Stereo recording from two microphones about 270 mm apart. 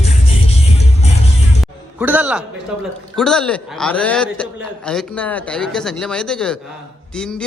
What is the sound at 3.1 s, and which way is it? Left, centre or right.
A man's voice, centre.